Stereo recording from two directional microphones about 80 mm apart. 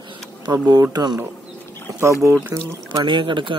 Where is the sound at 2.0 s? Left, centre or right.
Right.